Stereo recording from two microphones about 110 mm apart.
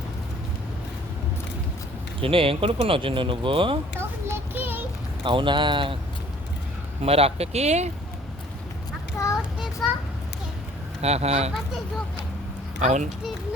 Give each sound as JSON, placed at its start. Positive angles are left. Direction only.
{"t": 2.2, "sound": "speech", "side_deg": -55}
{"t": 4.3, "sound": "child singing", "side_deg": -20}
{"t": 5.2, "sound": "speech", "side_deg": -50}
{"t": 7.0, "sound": "speech", "side_deg": -65}
{"t": 9.1, "sound": "child singing", "side_deg": 25}
{"t": 11.0, "sound": "speech", "side_deg": -75}
{"t": 12.8, "sound": "speech", "side_deg": -90}